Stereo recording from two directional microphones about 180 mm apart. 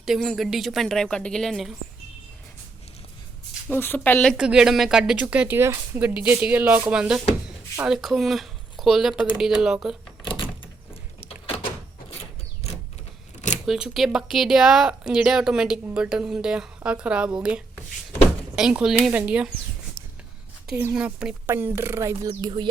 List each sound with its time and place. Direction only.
0.0 s speech: centre (ahead or behind)
3.7 s speech: 10° left (ahead or behind)
13.7 s speech: centre (ahead or behind)
18.5 s speech: 5° right (ahead or behind)
20.7 s a woman's voice: 10° right (ahead or behind)
22.3 s music: 25° right (ahead or behind)